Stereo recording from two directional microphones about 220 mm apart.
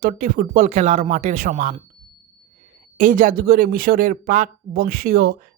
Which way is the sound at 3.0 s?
35° right (ahead or behind).